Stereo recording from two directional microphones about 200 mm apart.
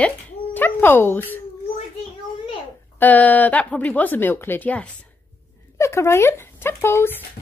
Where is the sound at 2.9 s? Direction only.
10° left (ahead or behind).